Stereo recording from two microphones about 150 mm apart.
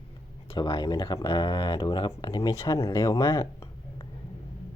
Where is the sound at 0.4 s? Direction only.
35° left (ahead or behind); by 4.0 s 20° left (ahead or behind).